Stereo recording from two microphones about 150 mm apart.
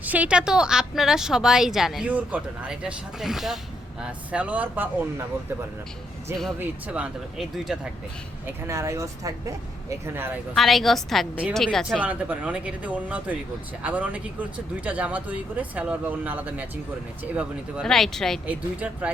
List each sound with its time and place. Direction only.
0.0 s speech: 10° right (ahead or behind)
6.6 s speech: 10° right (ahead or behind)
8.4 s speech: 20° right (ahead or behind)
10.5 s speech: centre (ahead or behind)
12.0 s speech: 10° right (ahead or behind)
17.8 s speech: 5° left (ahead or behind)
18.4 s speech: 10° right (ahead or behind)